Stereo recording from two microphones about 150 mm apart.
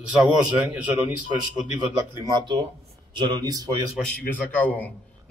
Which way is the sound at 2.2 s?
30° right (ahead or behind).